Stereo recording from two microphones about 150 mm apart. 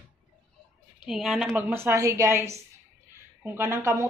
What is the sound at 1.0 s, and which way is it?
Speech, 5° right (ahead or behind).